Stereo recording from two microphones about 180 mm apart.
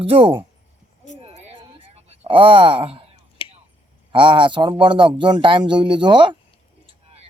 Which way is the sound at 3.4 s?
30° left (ahead or behind).